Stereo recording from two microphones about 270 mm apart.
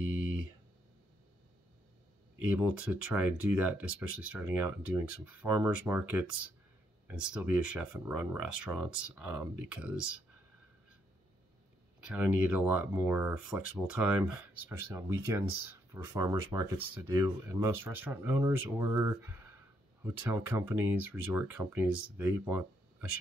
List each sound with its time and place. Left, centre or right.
2.5 s speech: centre
12.1 s speech: centre